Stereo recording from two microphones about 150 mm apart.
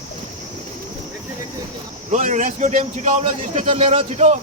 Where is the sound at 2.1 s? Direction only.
55° right (ahead or behind).